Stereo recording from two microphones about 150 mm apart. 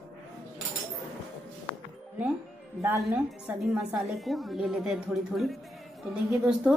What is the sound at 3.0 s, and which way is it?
A woman's voice, 5° right (ahead or behind).